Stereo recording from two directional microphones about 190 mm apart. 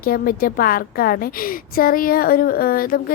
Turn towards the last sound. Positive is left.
turn(degrees=50)  # may be behind; listen again after turning